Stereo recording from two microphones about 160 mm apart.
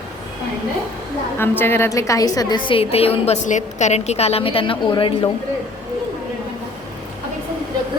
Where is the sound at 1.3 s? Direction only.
15° left (ahead or behind); by 5.3 s 30° left (ahead or behind).